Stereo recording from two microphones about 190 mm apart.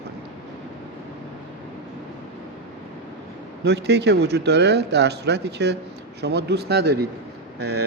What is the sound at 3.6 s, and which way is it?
Speech, 60° right (ahead or behind).